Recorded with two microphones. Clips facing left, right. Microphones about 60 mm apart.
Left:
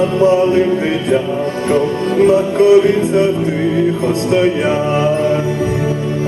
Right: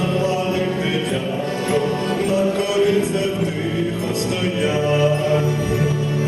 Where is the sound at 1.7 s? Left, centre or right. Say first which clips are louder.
Left 6 dB; left.